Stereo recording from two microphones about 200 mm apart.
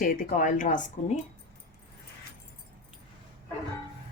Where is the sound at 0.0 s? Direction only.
45° left (ahead or behind).